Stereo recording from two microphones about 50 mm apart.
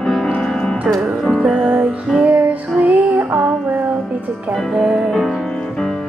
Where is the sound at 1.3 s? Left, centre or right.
Centre.